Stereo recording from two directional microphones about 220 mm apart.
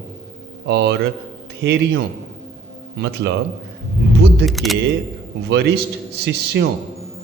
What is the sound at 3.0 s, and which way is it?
Speech, 50° right (ahead or behind).